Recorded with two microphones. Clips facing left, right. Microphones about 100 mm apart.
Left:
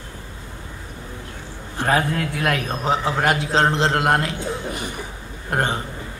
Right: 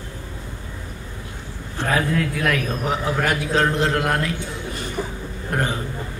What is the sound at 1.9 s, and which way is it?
A man's voice, 30° left (ahead or behind).